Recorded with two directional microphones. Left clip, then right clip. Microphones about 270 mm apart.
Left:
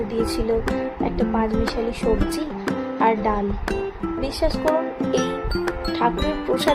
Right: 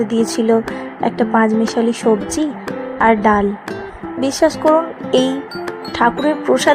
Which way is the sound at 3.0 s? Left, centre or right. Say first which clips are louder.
Right 8 dB; right.